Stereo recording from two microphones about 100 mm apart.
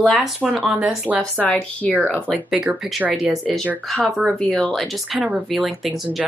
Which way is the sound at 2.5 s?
10° right (ahead or behind).